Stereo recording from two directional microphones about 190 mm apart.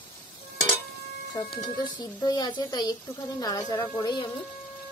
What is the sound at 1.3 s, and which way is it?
Speech, 25° left (ahead or behind).